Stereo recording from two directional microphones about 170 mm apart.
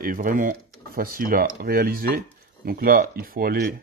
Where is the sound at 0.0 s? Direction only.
55° right (ahead or behind).